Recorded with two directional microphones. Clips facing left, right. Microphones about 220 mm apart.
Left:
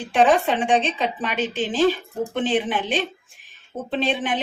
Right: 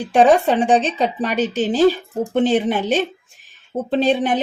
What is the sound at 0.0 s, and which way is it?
A woman's voice, 40° right (ahead or behind).